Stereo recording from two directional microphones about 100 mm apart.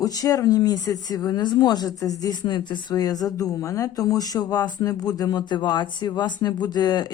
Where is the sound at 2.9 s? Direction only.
40° left (ahead or behind).